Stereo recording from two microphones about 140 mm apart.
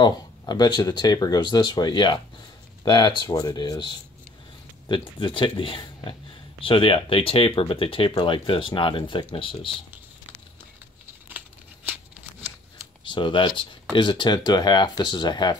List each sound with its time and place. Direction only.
0.0 s speech: 30° left (ahead or behind)
11.2 s tearing: 10° right (ahead or behind)
13.0 s speech: 35° left (ahead or behind)